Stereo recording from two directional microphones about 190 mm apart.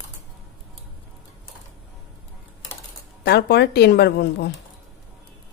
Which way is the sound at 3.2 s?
60° left (ahead or behind).